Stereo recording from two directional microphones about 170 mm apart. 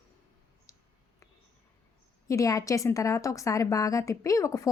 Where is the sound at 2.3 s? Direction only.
20° left (ahead or behind).